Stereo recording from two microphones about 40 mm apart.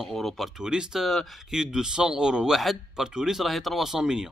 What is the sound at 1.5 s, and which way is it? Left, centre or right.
Speech, centre.